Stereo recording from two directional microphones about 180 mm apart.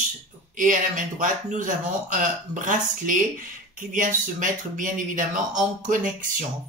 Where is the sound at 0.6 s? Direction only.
45° right (ahead or behind).